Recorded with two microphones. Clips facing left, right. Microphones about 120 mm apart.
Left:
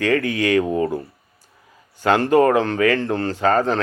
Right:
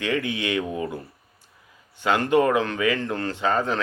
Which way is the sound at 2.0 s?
40° left (ahead or behind).